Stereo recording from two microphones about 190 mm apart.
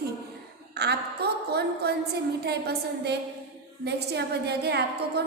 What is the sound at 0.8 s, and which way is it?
A woman's voice, 60° right (ahead or behind).